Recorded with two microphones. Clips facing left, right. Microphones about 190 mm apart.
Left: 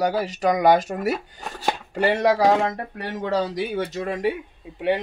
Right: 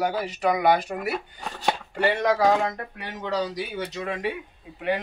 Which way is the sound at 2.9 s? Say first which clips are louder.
Left 5 dB; 50° left (ahead or behind).